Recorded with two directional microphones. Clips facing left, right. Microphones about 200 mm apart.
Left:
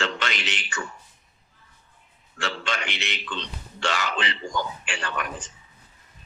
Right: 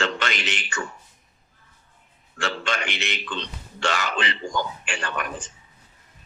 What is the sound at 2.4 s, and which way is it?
A man's voice, 50° right (ahead or behind).